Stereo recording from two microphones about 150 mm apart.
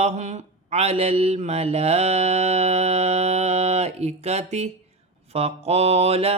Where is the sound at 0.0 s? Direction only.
50° right (ahead or behind).